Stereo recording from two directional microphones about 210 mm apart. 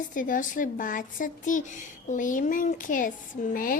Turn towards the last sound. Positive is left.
turn(degrees=40)  # may be behind; listen again after turning